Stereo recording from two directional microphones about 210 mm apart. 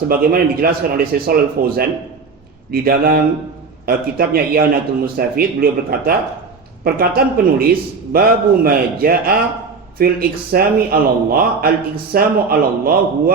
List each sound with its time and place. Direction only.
0.1 s a man's voice: 45° right (ahead or behind)